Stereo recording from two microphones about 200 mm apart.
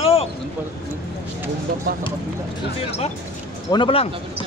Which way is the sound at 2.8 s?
30° left (ahead or behind).